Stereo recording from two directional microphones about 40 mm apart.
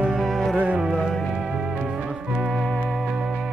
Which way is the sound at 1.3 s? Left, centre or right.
Centre.